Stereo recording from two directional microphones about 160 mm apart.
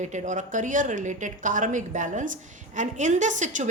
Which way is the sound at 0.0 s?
50° right (ahead or behind).